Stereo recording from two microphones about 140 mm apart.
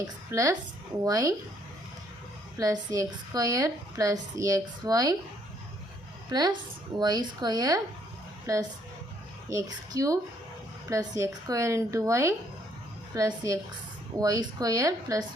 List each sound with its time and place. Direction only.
0.0 s a woman's voice: 25° right (ahead or behind)
2.6 s a woman's voice: 25° right (ahead or behind)
6.3 s a woman's voice: 30° right (ahead or behind)